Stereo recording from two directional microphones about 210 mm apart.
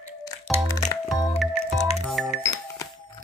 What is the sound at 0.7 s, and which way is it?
Music, 15° left (ahead or behind).